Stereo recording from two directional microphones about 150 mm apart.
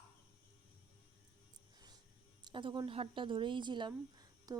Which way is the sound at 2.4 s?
30° right (ahead or behind).